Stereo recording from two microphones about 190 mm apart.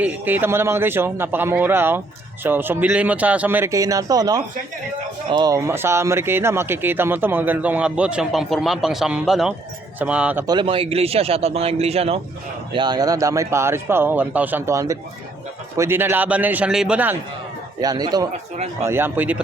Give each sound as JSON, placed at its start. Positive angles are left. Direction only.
{"t": 0.0, "sound": "speech", "side_deg": -10}
{"t": 10.4, "sound": "a man's voice", "side_deg": -25}
{"t": 17.7, "sound": "speech", "side_deg": -20}